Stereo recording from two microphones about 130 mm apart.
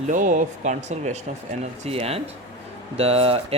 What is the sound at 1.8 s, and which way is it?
Speech, 50° right (ahead or behind).